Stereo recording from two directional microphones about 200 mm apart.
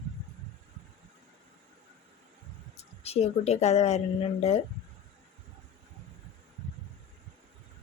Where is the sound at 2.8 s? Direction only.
30° left (ahead or behind).